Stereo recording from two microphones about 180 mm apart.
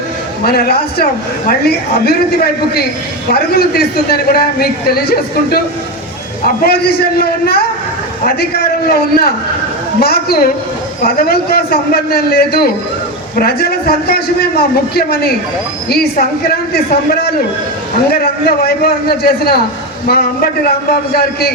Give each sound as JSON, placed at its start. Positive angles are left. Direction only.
{"t": 0.4, "sound": "a man's voice", "side_deg": 60}
{"t": 6.6, "sound": "a man's voice", "side_deg": 60}
{"t": 8.9, "sound": "a man's voice", "side_deg": 60}
{"t": 16.5, "sound": "a man's voice", "side_deg": 60}